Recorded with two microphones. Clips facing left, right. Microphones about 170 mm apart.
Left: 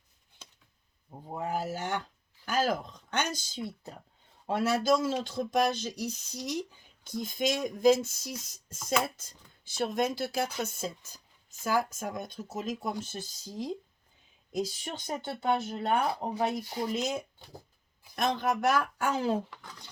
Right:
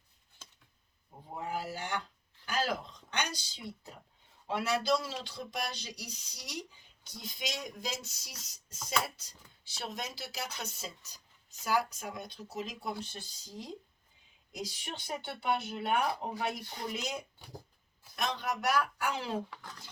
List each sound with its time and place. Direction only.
1.5 s speech: 45° left (ahead or behind)
2.5 s a sound: 45° left (ahead or behind)
4.4 s speech: 45° left (ahead or behind)
14.7 s speech: 45° left (ahead or behind)
19.5 s speech: centre (ahead or behind)